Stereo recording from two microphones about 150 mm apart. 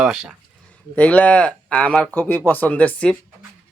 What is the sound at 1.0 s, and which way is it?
Speech, 10° left (ahead or behind).